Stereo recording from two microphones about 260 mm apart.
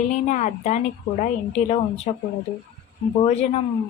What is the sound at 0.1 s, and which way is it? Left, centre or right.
Speech, left.